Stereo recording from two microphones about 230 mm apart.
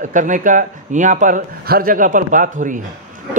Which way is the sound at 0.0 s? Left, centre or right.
Right.